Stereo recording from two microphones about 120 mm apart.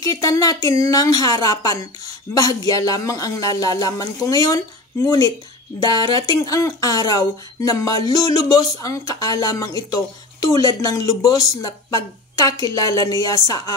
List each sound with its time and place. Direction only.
0.0 s speech: 30° left (ahead or behind)